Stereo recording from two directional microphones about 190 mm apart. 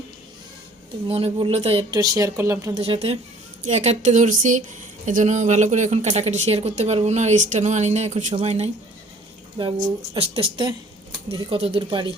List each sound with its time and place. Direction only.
1.0 s a woman's voice: 30° right (ahead or behind)
2.8 s speech: 30° right (ahead or behind)
10.2 s a woman's voice: 30° right (ahead or behind)